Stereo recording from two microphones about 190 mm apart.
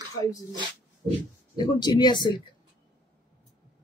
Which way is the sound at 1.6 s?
20° left (ahead or behind).